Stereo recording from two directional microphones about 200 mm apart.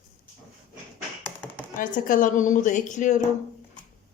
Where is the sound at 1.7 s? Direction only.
40° left (ahead or behind).